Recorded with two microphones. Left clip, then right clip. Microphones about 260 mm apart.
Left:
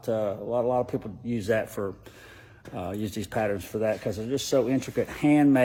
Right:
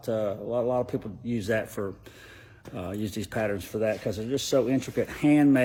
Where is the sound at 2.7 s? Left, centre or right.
Centre.